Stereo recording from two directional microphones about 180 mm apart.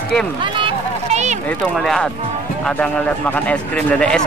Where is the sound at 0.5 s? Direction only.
35° right (ahead or behind).